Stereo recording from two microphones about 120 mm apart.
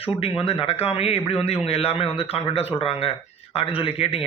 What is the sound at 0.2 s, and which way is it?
A man's voice, 50° left (ahead or behind).